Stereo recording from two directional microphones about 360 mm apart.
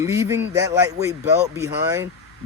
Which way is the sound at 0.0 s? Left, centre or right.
Centre.